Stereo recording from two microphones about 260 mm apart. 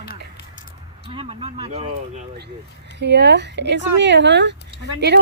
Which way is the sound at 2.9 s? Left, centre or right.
Right.